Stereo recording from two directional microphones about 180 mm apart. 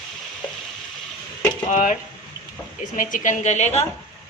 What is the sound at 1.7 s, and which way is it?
Speech, 45° left (ahead or behind).